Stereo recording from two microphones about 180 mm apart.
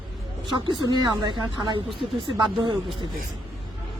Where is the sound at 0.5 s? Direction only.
25° right (ahead or behind).